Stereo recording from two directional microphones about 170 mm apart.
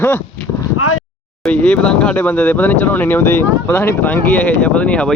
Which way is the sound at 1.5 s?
5° left (ahead or behind).